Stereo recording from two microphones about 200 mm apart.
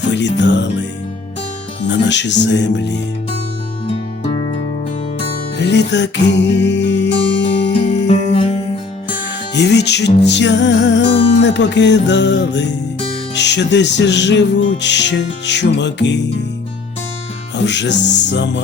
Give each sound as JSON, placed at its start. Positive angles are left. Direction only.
{"t": 0.1, "sound": "music", "side_deg": 60}
{"t": 1.9, "sound": "music", "side_deg": 60}
{"t": 5.5, "sound": "music", "side_deg": 60}
{"t": 7.7, "sound": "music", "side_deg": 35}
{"t": 9.6, "sound": "music", "side_deg": 55}
{"t": 17.7, "sound": "music", "side_deg": 60}